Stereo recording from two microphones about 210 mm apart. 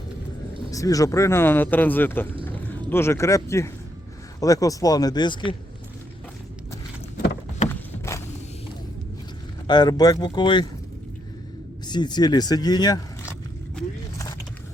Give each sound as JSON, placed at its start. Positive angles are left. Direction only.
{"t": 0.7, "sound": "speech", "side_deg": 15}
{"t": 7.7, "sound": "a sound", "side_deg": 15}
{"t": 9.6, "sound": "speech", "side_deg": 20}
{"t": 11.9, "sound": "speech", "side_deg": 20}